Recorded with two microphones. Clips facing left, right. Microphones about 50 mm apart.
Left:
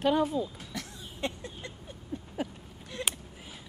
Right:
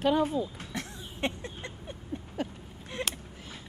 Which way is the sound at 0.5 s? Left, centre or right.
Right.